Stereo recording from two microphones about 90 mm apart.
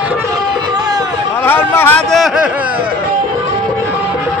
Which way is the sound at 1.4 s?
25° left (ahead or behind).